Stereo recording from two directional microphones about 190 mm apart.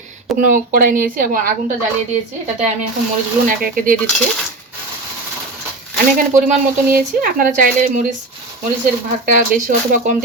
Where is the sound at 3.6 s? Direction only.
50° right (ahead or behind).